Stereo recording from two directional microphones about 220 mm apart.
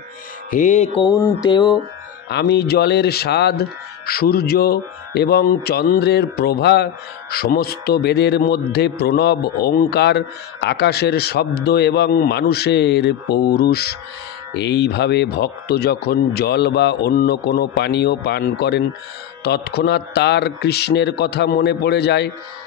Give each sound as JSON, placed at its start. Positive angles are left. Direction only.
{"t": 0.5, "sound": "mantra", "side_deg": 35}
{"t": 0.9, "sound": "speech", "side_deg": 15}
{"t": 2.2, "sound": "speech", "side_deg": 50}